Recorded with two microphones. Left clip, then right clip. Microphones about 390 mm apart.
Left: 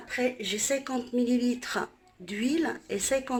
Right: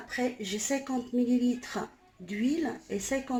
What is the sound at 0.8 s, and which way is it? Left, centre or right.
Speech, left.